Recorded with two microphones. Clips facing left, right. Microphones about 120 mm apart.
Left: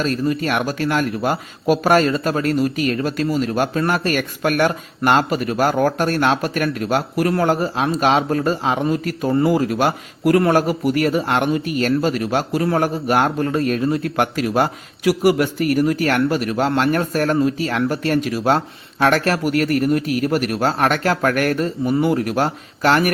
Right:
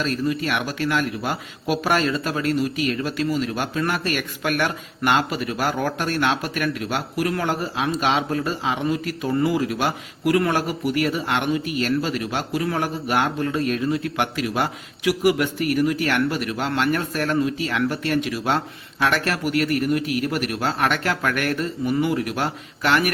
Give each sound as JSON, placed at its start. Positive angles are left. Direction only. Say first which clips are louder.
{"t": 0.0, "sound": "a man's voice", "louder": "left 3 dB", "side_deg": 40}